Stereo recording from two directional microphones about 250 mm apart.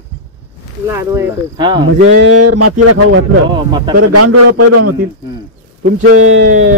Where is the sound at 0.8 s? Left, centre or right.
Centre.